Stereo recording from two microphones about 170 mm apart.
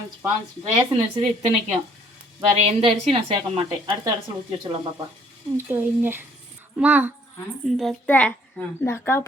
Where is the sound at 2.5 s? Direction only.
35° right (ahead or behind).